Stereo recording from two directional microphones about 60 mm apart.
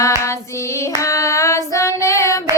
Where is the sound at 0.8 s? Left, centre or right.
Left.